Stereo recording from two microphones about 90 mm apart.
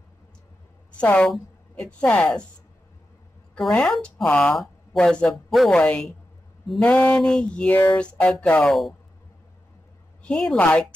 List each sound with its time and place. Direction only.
0.9 s speech: 15° left (ahead or behind)
3.7 s a woman's voice: 10° left (ahead or behind)
8.6 s a woman's voice: centre (ahead or behind)
10.2 s a woman's voice: 5° left (ahead or behind)